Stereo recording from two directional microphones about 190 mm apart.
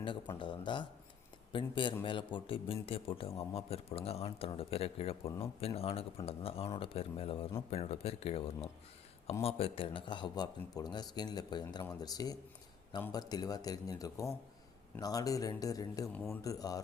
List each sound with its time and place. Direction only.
0.3 s speech: 25° left (ahead or behind)